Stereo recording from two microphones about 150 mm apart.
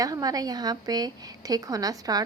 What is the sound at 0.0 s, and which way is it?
A woman's voice, 25° right (ahead or behind).